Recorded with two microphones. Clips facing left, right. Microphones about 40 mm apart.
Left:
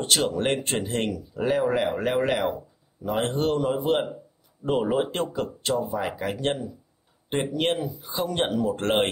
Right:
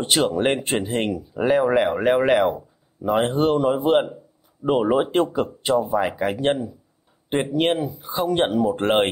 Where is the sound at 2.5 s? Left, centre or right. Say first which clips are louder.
Right 2 dB; centre.